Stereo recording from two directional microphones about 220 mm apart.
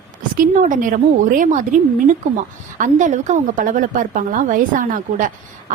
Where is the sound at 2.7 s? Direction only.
35° right (ahead or behind).